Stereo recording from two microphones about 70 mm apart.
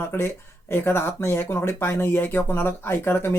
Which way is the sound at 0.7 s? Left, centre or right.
Left.